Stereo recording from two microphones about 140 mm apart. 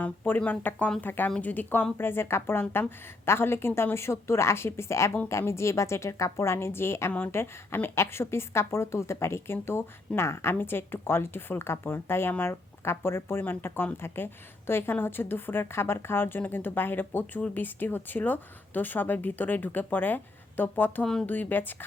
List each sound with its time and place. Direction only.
0.0 s a woman's voice: 10° left (ahead or behind)